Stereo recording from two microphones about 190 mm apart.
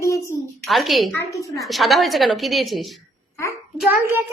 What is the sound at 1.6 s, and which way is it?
A woman's voice, centre (ahead or behind).